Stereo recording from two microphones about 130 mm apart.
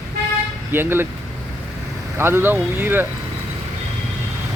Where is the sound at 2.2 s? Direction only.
20° right (ahead or behind).